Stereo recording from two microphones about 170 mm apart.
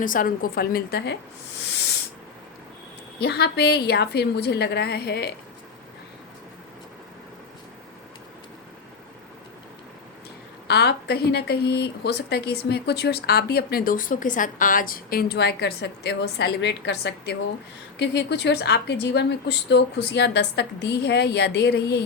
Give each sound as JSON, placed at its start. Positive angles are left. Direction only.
{"t": 0.0, "sound": "a woman's voice", "side_deg": 55}
{"t": 3.2, "sound": "speech", "side_deg": 75}
{"t": 10.7, "sound": "a woman's voice", "side_deg": 75}